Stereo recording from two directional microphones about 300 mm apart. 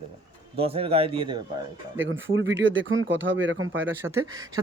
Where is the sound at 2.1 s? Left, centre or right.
Right.